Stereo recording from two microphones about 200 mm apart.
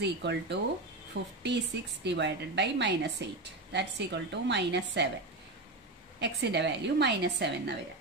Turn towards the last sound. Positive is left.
turn(degrees=-55)  # may be behind; listen again after turning